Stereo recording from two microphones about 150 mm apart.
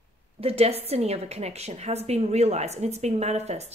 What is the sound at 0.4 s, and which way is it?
A woman's voice, 40° right (ahead or behind).